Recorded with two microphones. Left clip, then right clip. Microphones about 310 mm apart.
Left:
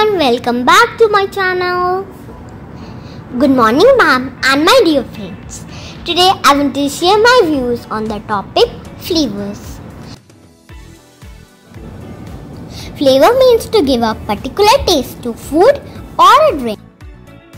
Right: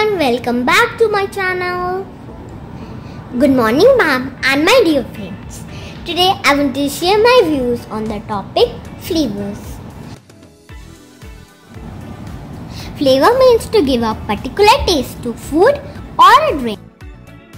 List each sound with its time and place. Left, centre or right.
0.0 s a woman's voice: centre
3.1 s a woman's voice: centre
12.6 s a woman's voice: centre